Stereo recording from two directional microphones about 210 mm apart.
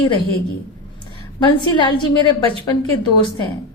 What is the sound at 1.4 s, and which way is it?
Speech, 20° left (ahead or behind).